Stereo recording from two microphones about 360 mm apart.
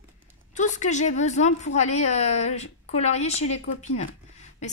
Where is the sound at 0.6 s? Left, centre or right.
Centre.